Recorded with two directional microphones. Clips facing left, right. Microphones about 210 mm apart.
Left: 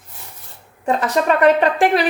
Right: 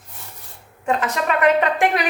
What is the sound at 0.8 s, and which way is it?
A woman's voice, 35° left (ahead or behind).